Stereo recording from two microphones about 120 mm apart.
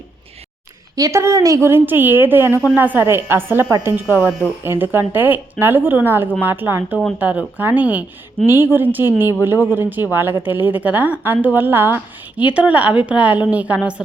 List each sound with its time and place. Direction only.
0.9 s a woman's voice: 25° right (ahead or behind); by 13.9 s 10° right (ahead or behind)